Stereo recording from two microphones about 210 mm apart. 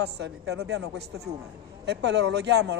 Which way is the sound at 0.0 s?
55° right (ahead or behind).